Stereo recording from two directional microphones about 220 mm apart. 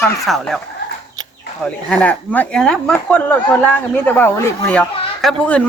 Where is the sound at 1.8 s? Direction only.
5° left (ahead or behind).